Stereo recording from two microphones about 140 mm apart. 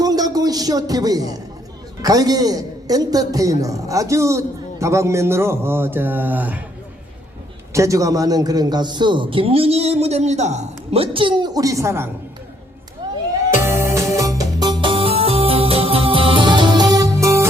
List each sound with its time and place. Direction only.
0.0 s a sound: 25° right (ahead or behind)
2.0 s a man's voice: 25° right (ahead or behind)
7.7 s a man's voice: 20° right (ahead or behind)
13.0 s music: 30° right (ahead or behind)
13.6 s music: 20° right (ahead or behind)